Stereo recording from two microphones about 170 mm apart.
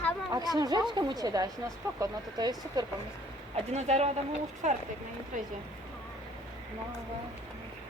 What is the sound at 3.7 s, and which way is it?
Speech, 40° right (ahead or behind).